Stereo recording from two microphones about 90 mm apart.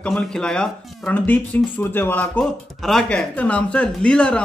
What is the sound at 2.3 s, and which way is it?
Speech, 5° left (ahead or behind).